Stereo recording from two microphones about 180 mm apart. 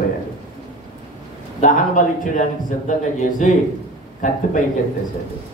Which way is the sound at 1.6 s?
45° left (ahead or behind).